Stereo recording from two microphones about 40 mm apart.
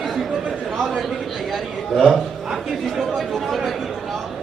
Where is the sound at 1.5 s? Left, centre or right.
Centre.